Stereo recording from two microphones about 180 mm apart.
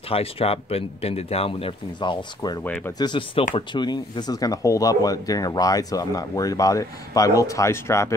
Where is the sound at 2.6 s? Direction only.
10° left (ahead or behind).